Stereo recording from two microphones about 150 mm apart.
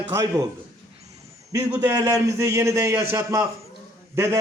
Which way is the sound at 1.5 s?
15° right (ahead or behind).